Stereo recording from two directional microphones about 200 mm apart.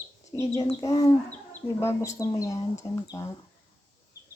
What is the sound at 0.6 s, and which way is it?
Speech, 15° left (ahead or behind).